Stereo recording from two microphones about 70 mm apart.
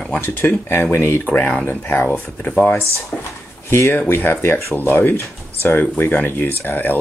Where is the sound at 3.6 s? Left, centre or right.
Left.